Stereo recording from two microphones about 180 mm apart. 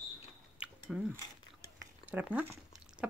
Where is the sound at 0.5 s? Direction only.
5° right (ahead or behind).